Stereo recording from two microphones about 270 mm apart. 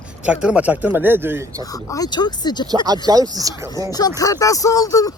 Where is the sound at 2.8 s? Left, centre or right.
Centre.